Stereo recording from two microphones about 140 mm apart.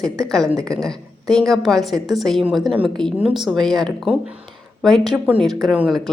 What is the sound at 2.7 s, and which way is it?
Speech, 40° right (ahead or behind).